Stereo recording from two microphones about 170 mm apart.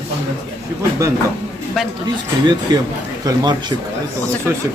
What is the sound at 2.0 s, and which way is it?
Speech, 25° right (ahead or behind).